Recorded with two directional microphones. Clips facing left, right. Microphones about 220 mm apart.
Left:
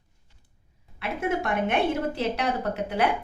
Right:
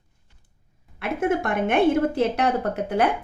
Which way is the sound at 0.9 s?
50° right (ahead or behind).